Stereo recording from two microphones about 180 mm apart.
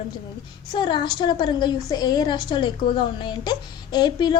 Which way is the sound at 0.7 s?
25° left (ahead or behind).